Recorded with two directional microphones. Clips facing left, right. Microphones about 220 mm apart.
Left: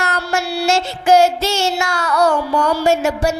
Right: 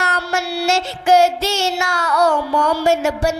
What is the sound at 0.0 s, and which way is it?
Child singing, 15° left (ahead or behind).